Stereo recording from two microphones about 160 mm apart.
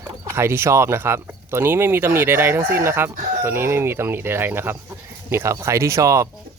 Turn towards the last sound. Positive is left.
turn(degrees=-20)  # may be behind; listen again after turning